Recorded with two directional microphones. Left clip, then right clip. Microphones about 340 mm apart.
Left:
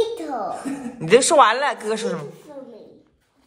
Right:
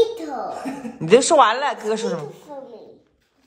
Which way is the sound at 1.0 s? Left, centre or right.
Centre.